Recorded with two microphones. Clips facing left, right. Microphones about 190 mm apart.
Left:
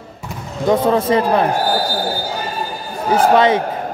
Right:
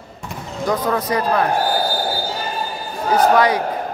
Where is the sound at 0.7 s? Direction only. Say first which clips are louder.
Left 6 dB; 25° left (ahead or behind).